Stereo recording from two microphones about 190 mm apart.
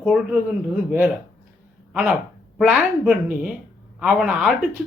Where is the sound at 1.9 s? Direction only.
5° right (ahead or behind).